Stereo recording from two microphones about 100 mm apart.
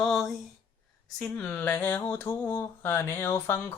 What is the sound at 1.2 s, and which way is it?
Speech, 20° left (ahead or behind).